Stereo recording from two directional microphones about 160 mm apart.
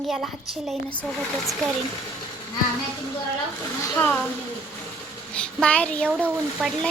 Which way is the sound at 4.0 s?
10° left (ahead or behind).